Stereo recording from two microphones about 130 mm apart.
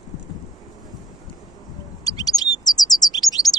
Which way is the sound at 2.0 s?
30° left (ahead or behind).